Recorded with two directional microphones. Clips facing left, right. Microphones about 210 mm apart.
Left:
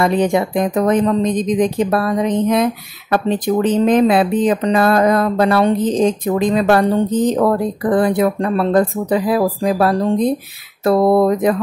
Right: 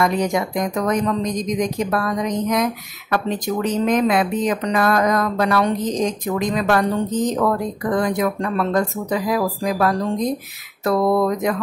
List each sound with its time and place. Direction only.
0.0 s a woman's voice: 30° left (ahead or behind)
7.1 s speech: 60° left (ahead or behind)
7.3 s a woman's voice: 30° left (ahead or behind)